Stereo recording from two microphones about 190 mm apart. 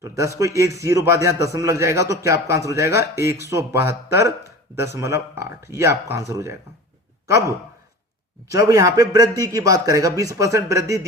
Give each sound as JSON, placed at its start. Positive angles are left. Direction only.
{"t": 0.0, "sound": "speech", "side_deg": -15}
{"t": 8.4, "sound": "speech", "side_deg": -15}